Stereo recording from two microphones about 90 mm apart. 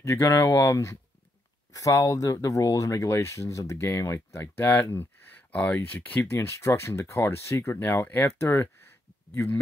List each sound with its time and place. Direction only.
0.0 s speech: 35° left (ahead or behind)